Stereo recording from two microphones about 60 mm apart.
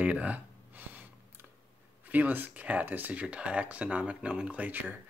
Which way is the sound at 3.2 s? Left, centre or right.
Centre.